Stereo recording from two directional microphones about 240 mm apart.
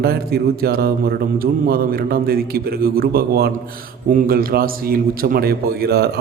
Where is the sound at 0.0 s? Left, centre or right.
Right.